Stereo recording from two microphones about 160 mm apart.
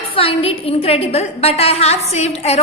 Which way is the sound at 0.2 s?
35° left (ahead or behind).